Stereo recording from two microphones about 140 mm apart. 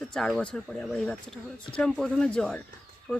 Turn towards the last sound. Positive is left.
turn(degrees=10)  # may be behind; listen again after turning